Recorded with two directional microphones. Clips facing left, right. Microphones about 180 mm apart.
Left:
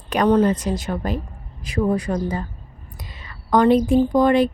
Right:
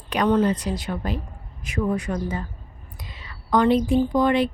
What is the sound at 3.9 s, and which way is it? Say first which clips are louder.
Speech: left 4 dB; 45° left (ahead or behind).